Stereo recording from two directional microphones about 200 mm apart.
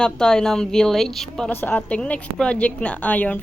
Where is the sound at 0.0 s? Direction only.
5° left (ahead or behind).